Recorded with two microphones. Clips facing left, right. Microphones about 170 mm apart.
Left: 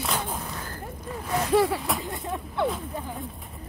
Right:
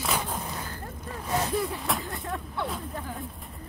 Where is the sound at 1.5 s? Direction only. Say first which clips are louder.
Left 8 dB; 90° left.